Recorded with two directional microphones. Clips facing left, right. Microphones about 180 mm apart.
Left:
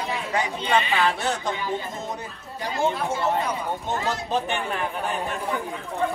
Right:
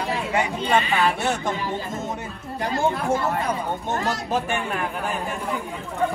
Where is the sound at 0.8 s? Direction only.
35° right (ahead or behind).